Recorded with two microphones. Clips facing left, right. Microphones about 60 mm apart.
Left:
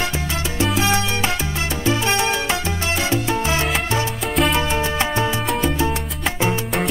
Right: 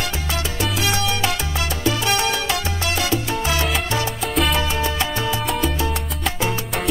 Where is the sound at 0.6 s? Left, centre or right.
Left.